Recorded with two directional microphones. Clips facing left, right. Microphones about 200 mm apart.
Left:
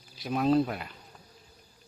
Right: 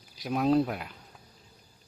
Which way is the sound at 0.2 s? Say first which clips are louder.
Even; 10° right (ahead or behind).